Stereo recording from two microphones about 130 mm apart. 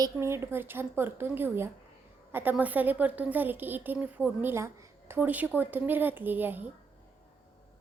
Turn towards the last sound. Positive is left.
turn(degrees=-15)  # may be behind; listen again after turning